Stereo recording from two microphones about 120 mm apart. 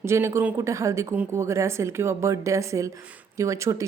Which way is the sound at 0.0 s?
25° right (ahead or behind).